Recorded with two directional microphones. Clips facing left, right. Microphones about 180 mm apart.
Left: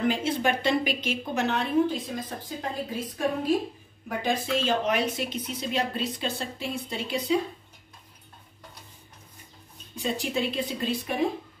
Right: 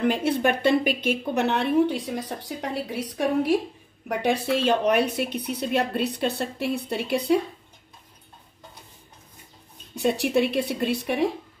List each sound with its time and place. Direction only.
0.1 s a woman's voice: 60° right (ahead or behind)
9.9 s a woman's voice: 70° right (ahead or behind)